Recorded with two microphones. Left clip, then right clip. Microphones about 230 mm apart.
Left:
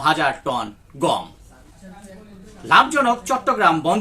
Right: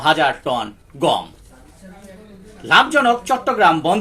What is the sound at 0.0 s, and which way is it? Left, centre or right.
Speech, left.